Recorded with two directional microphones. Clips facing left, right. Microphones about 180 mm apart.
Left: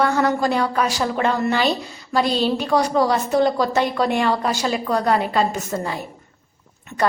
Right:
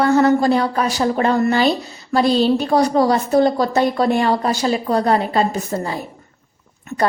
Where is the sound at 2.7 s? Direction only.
35° right (ahead or behind).